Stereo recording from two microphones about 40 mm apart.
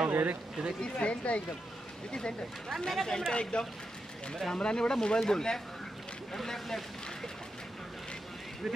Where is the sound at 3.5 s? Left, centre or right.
Left; by 6.8 s centre.